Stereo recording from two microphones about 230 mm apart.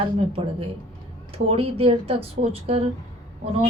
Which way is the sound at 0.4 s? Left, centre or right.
Right.